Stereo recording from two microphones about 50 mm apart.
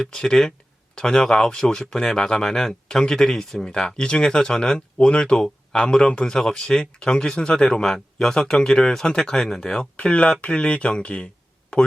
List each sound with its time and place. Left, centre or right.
0.0 s speech: centre